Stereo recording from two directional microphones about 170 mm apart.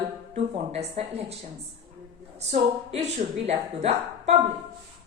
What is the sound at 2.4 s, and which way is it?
A woman's voice, 40° right (ahead or behind).